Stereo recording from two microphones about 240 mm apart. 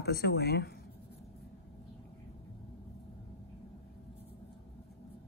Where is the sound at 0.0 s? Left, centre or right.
Left.